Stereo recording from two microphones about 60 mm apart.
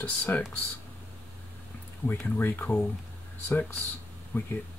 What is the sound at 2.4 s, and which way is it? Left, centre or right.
Speech, left.